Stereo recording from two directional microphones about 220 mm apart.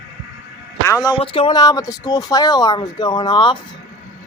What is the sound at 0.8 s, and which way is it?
Speech, 15° left (ahead or behind).